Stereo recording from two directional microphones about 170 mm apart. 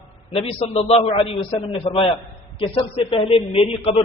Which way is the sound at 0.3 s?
35° left (ahead or behind).